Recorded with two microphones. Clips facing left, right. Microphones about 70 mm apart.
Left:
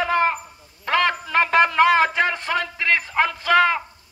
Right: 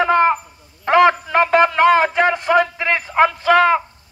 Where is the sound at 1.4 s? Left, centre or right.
Centre.